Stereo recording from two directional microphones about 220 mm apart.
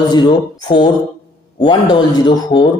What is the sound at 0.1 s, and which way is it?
Speech, 20° left (ahead or behind).